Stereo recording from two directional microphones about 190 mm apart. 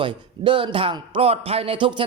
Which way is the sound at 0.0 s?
25° right (ahead or behind).